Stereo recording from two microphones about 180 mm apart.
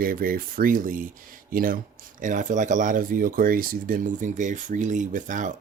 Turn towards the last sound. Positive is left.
turn(degrees=-45)  # may be behind; listen again after turning